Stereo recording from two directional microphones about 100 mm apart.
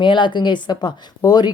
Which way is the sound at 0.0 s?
55° left (ahead or behind).